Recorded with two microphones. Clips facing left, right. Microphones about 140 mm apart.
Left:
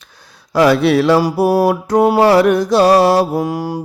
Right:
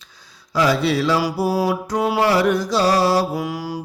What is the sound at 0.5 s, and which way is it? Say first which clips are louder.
Mantra: left 7 dB; 60° left (ahead or behind).